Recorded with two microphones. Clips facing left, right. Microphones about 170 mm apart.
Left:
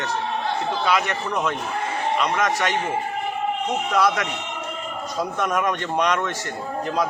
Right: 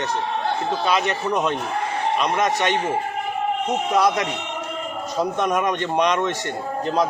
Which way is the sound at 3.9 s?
25° right (ahead or behind).